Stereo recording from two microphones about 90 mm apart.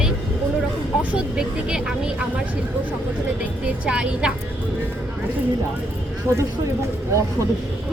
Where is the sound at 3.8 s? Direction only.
10° right (ahead or behind).